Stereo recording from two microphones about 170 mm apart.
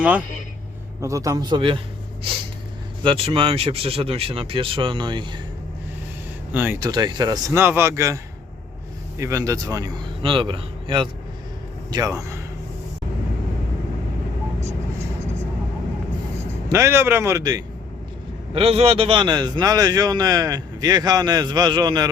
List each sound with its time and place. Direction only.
1.0 s a man's voice: 20° right (ahead or behind)
3.0 s speech: 30° right (ahead or behind)
6.5 s speech: 10° right (ahead or behind)
6.7 s a man's voice: 25° right (ahead or behind)
16.6 s a man's voice: 15° right (ahead or behind)
18.5 s a man's voice: 35° right (ahead or behind)